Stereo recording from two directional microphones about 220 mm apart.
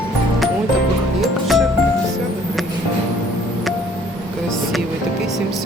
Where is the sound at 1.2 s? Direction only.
Centre (ahead or behind).